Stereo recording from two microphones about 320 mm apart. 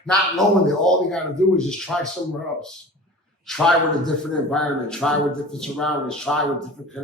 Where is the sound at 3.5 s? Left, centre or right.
Centre.